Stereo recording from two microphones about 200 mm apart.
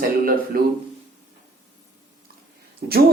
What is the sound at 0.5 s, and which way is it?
Speech, 45° right (ahead or behind).